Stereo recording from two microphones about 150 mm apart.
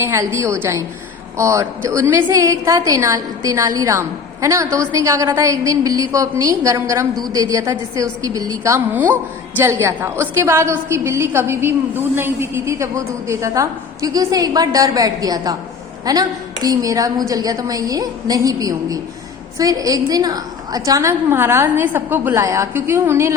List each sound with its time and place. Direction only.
0.0 s a woman's voice: 15° right (ahead or behind)